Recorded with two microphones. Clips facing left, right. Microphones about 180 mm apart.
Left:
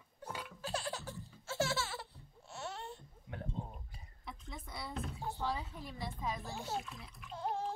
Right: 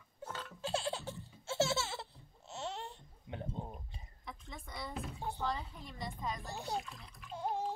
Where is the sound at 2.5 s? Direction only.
25° right (ahead or behind).